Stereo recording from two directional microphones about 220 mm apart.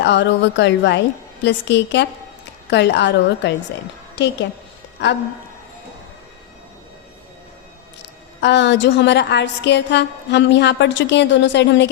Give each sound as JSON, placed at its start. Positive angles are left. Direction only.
{"t": 0.0, "sound": "a woman's voice", "side_deg": 55}
{"t": 8.4, "sound": "a woman's voice", "side_deg": 55}